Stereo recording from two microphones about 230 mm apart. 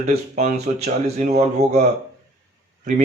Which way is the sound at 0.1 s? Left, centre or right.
Right.